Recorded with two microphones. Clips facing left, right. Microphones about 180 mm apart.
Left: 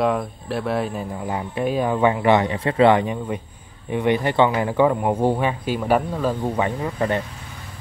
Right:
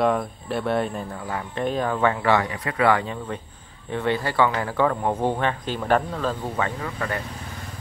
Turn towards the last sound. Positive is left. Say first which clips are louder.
# left 6 dB
turn(degrees=25)  # may be behind; listen again after turning